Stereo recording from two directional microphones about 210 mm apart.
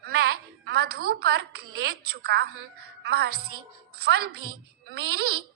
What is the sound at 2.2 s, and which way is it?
A woman's voice, 50° right (ahead or behind).